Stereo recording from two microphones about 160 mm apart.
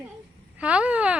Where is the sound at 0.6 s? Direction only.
5° right (ahead or behind).